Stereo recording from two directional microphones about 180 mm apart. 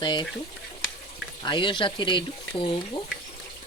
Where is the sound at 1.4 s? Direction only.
25° left (ahead or behind).